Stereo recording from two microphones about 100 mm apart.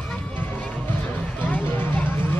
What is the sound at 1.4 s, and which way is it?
Music, 15° left (ahead or behind).